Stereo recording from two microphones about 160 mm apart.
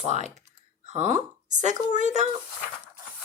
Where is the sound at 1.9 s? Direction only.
50° right (ahead or behind).